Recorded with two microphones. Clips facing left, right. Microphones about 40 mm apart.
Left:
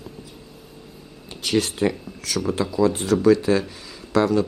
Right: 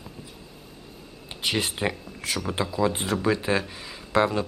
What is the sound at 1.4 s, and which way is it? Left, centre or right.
Speech, centre.